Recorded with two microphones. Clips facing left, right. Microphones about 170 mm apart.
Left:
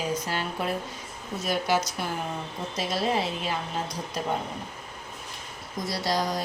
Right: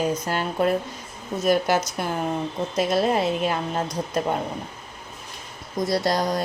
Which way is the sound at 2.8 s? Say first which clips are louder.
Right 6 dB; 50° right (ahead or behind).